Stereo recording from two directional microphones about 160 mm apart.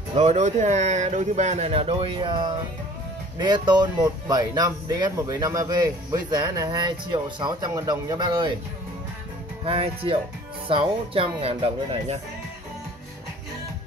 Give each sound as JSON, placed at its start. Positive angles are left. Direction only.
{"t": 0.1, "sound": "speech", "side_deg": -45}
{"t": 9.7, "sound": "speech", "side_deg": -35}